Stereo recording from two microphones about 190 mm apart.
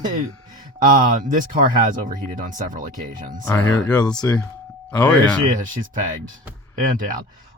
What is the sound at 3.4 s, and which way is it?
Speech, 15° left (ahead or behind).